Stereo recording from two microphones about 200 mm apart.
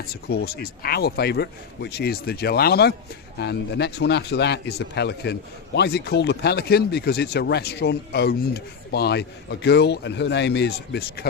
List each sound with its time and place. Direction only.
0.1 s a man's voice: 50° left (ahead or behind)